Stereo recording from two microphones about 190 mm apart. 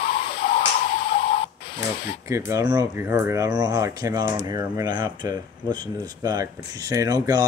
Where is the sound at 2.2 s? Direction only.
15° right (ahead or behind).